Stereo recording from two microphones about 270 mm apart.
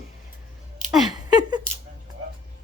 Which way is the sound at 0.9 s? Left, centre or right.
Centre.